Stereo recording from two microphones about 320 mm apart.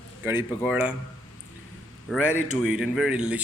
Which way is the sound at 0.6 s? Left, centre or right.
Centre.